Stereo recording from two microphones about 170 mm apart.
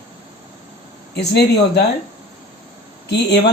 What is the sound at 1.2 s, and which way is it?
Speech, 80° left.